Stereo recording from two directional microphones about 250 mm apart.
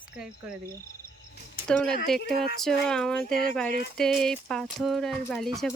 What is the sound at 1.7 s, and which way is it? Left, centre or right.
Speech, centre.